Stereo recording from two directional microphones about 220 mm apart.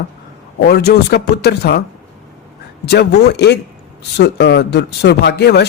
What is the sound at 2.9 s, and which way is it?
Speech, 50° left (ahead or behind).